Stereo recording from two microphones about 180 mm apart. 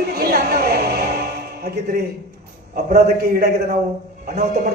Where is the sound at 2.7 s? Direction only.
60° right (ahead or behind).